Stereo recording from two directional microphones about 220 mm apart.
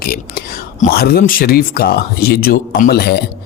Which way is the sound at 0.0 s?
45° left (ahead or behind).